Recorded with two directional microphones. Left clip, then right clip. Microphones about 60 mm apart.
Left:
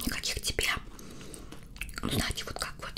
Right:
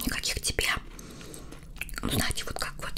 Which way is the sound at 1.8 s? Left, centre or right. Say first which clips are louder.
Right 2 dB; right.